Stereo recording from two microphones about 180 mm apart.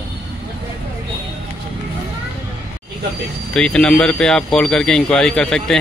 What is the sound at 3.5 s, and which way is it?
Speech, 5° left (ahead or behind).